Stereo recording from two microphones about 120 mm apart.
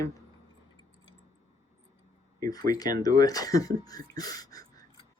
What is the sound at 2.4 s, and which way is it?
Speech, 30° left (ahead or behind).